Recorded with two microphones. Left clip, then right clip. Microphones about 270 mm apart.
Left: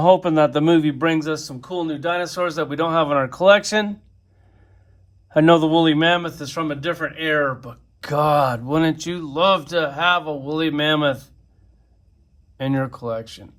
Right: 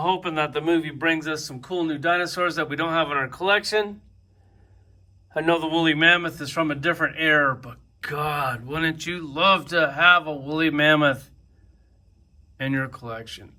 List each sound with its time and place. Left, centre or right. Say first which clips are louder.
0.0 s speech: left 9 dB; left
5.5 s speech: left 5 dB; centre
12.5 s speech: left 3 dB; centre